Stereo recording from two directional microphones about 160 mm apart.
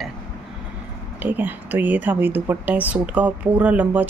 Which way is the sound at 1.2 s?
10° right (ahead or behind).